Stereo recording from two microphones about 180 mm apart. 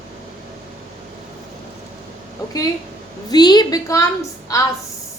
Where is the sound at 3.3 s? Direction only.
25° left (ahead or behind).